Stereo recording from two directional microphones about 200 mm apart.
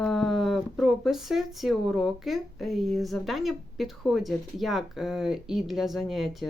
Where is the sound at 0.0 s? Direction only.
Centre (ahead or behind).